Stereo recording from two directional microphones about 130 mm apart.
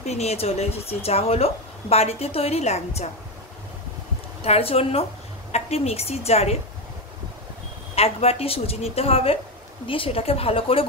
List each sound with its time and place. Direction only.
0.0 s speech: 55° left (ahead or behind)
4.4 s speech: 50° left (ahead or behind)
7.9 s speech: 50° left (ahead or behind)